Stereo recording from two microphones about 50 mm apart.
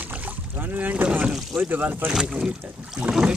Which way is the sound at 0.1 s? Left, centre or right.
Right.